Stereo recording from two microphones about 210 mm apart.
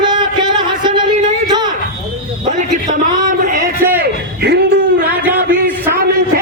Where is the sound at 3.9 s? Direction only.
50° right (ahead or behind).